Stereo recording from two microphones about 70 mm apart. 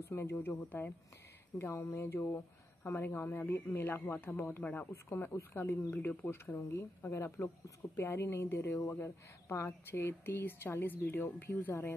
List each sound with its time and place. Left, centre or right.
0.0 s speech: left
1.6 s speech: left
6.5 s speech: left